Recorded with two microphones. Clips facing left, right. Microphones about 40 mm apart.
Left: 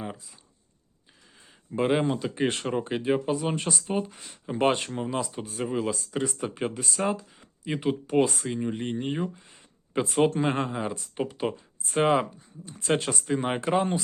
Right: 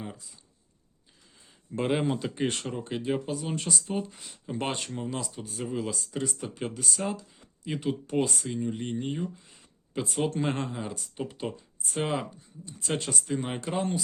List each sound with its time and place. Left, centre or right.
1.7 s speech: centre
2.0 s speech: centre
2.4 s speech: centre
8.4 s speech: left
9.5 s a sound: left
10.2 s speech: centre
11.2 s speech: left